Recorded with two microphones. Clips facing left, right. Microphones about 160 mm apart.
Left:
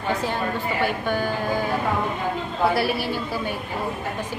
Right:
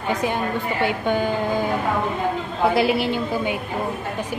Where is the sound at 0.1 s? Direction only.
15° right (ahead or behind).